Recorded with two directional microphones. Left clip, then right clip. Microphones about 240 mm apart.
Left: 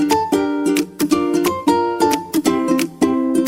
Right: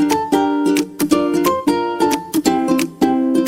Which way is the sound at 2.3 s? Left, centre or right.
Right.